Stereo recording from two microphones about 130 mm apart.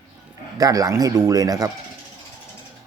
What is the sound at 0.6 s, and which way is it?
Speech, 25° right (ahead or behind).